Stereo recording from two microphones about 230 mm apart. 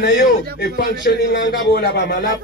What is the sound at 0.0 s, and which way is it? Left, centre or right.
Speech, left.